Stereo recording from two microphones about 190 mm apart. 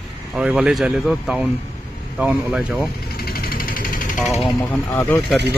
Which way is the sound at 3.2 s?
55° left (ahead or behind).